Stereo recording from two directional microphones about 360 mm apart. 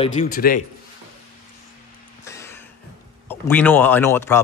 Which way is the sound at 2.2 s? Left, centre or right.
Centre.